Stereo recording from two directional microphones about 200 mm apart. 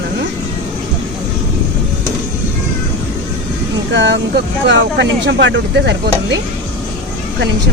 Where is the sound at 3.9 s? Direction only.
60° right (ahead or behind).